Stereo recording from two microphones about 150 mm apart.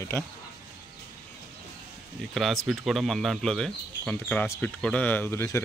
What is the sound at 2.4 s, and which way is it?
Speech, centre (ahead or behind).